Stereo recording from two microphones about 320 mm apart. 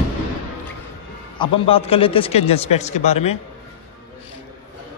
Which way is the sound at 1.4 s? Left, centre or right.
Centre.